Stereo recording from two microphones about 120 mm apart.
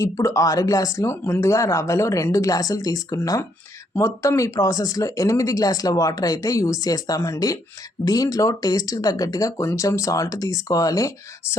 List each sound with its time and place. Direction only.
0.0 s speech: 25° left (ahead or behind)